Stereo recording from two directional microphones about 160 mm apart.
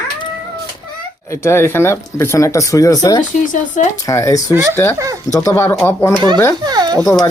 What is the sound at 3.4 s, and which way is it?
Speech, 55° left (ahead or behind).